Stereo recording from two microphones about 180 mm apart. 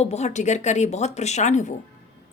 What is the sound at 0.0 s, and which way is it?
Speech, 40° left (ahead or behind).